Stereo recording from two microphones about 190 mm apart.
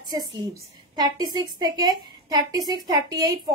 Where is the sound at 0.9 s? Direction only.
20° right (ahead or behind).